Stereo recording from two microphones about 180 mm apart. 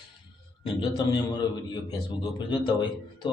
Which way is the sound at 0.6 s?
25° left (ahead or behind).